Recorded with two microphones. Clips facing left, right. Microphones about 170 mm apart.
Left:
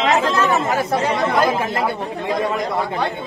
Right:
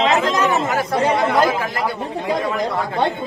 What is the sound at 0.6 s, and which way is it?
Speech, 20° left (ahead or behind).